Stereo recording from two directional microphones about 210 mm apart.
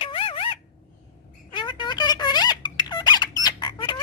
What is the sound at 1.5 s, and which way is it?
Squeak, 20° left (ahead or behind).